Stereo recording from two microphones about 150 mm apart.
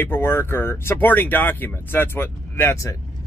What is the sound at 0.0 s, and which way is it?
Speech, 15° left (ahead or behind).